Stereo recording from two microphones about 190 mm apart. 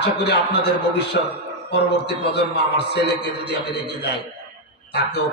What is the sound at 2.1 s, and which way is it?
A man's voice, 60° left (ahead or behind).